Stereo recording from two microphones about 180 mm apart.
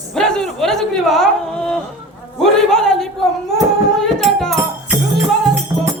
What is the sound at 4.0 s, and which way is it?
Music, centre (ahead or behind).